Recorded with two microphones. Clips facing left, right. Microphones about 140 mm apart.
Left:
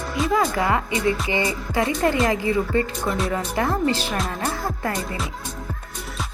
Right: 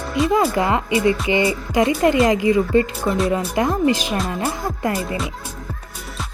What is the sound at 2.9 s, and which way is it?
Speech, 5° right (ahead or behind).